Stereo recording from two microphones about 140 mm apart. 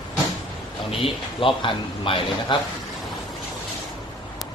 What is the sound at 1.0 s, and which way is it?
A man's voice, 40° left (ahead or behind).